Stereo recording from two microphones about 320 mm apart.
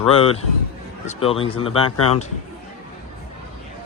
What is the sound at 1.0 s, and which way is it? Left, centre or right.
Speech, centre.